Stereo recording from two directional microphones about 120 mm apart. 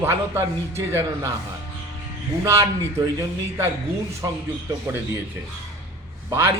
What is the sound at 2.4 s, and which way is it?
Speech, 25° right (ahead or behind).